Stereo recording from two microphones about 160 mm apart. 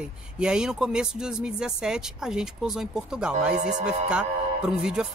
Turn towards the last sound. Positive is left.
turn(degrees=-5)  # may be behind; listen again after turning